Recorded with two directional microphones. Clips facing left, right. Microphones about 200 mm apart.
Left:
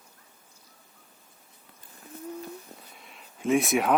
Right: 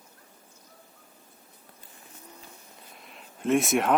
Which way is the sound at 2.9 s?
Centre (ahead or behind).